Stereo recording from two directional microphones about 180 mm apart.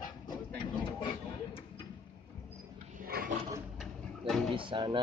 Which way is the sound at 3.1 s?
60° right (ahead or behind).